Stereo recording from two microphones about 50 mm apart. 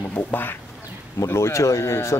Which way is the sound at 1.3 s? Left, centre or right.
Left.